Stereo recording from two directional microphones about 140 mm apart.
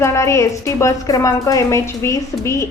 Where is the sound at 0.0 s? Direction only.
20° left (ahead or behind).